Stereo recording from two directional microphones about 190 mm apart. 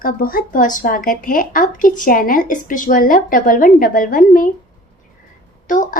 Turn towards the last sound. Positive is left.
turn(degrees=45)  # may be behind; listen again after turning